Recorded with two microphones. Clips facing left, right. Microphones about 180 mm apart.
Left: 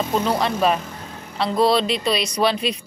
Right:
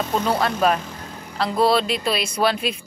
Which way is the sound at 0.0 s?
Centre (ahead or behind).